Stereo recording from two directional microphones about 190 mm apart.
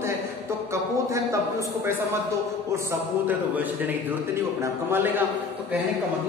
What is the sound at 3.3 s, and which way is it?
A man's voice, 10° right (ahead or behind).